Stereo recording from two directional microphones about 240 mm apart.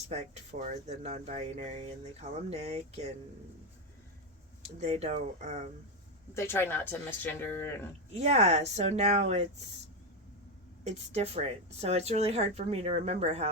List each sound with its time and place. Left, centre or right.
0.1 s speech: right
4.6 s speech: right
6.3 s speech: centre
8.1 s speech: right
10.8 s speech: right